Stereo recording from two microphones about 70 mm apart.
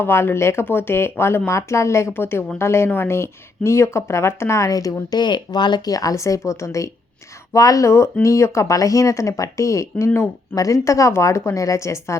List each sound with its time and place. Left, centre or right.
0.0 s speech: left